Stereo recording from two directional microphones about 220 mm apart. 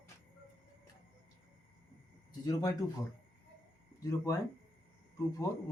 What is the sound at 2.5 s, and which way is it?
Speech, 15° left (ahead or behind).